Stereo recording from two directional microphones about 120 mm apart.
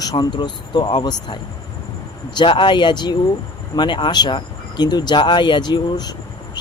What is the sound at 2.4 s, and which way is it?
Speech, 40° left (ahead or behind).